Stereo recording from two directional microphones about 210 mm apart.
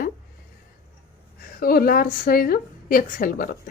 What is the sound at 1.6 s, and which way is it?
Speech, 45° left (ahead or behind).